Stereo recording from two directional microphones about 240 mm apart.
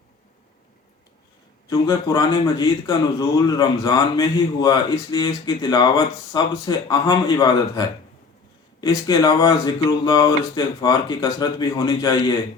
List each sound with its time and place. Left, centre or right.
1.7 s a man's voice: centre